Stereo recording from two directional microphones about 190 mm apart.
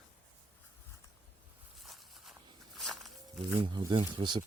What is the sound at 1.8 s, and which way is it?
Walk, centre (ahead or behind).